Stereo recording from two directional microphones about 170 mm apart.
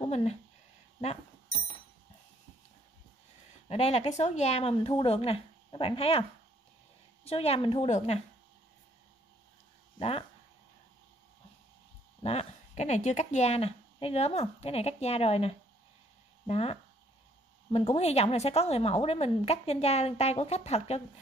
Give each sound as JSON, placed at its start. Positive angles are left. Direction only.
{"t": 0.0, "sound": "speech", "side_deg": 40}
{"t": 3.6, "sound": "speech", "side_deg": 40}
{"t": 7.2, "sound": "speech", "side_deg": 35}
{"t": 9.9, "sound": "speech", "side_deg": 35}
{"t": 12.2, "sound": "speech", "side_deg": 35}
{"t": 17.7, "sound": "speech", "side_deg": 40}